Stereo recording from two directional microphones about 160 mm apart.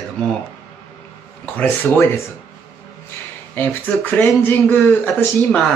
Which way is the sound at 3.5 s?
10° left (ahead or behind).